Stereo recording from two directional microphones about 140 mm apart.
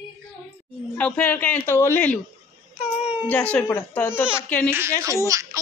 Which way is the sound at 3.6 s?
15° left (ahead or behind).